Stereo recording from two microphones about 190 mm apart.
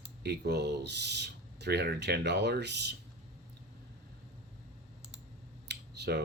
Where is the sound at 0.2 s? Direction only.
60° right (ahead or behind).